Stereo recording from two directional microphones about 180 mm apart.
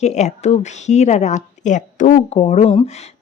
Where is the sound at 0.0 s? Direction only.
40° left (ahead or behind).